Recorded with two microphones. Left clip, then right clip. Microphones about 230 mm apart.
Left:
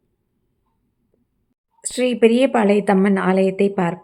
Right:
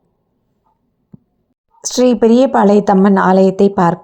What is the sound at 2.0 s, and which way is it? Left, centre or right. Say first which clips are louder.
A woman's voice: right 5 dB; centre.